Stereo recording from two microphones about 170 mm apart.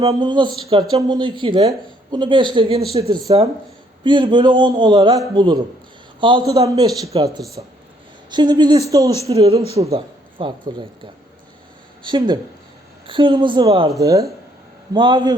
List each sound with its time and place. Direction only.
0.0 s a man's voice: 30° right (ahead or behind)